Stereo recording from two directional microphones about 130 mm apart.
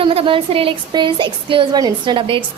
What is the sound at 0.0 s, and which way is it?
A woman's voice, 45° right (ahead or behind).